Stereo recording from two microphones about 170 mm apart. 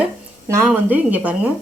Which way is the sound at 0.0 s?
15° right (ahead or behind).